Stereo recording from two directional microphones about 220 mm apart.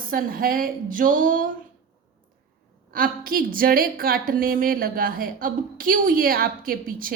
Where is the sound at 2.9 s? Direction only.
40° right (ahead or behind).